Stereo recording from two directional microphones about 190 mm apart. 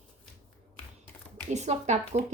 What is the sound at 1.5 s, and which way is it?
Speech, 35° right (ahead or behind).